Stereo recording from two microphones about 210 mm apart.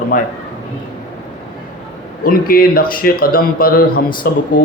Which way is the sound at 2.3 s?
45° left (ahead or behind).